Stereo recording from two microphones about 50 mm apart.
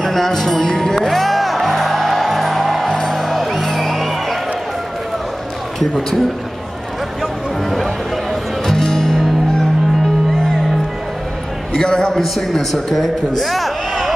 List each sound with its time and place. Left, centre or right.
0.0 s music: centre
5.8 s a man's voice: centre
8.6 s music: centre
11.8 s a man's voice: centre
12.1 s a man's voice: centre